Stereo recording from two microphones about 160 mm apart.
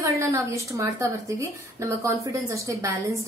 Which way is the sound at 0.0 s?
20° right (ahead or behind).